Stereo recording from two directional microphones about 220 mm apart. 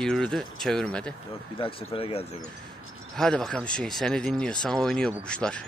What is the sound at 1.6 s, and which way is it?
Speech, 25° left (ahead or behind).